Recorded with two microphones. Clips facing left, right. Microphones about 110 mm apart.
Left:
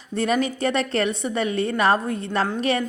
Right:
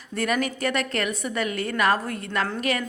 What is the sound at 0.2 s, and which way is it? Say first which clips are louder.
A woman's voice: left 3 dB; 25° left (ahead or behind).